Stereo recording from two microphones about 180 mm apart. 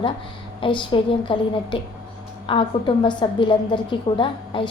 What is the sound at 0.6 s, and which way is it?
A woman's voice, 25° left (ahead or behind).